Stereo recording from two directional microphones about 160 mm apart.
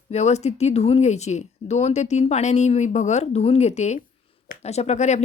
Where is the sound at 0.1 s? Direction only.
45° left (ahead or behind).